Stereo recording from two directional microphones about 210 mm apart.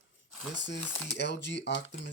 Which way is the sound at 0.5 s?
60° left (ahead or behind).